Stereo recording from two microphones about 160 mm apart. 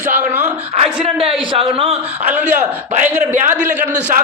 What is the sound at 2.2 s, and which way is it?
Speech, 10° right (ahead or behind).